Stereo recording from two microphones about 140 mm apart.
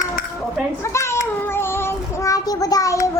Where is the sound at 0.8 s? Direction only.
20° left (ahead or behind).